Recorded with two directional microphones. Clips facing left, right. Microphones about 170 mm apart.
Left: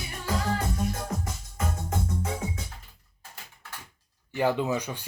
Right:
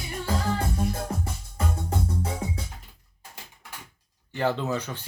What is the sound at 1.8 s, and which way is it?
Music, 35° right (ahead or behind).